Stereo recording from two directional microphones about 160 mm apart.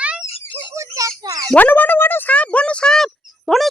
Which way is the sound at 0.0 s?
10° right (ahead or behind).